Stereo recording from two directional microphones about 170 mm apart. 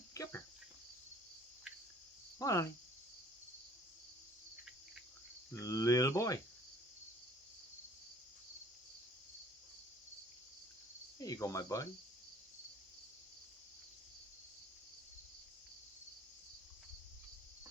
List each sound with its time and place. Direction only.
0.1 s cricket: 15° left (ahead or behind)
2.4 s speech: 20° left (ahead or behind)
5.5 s cricket: 20° left (ahead or behind)
11.2 s cricket: 20° left (ahead or behind)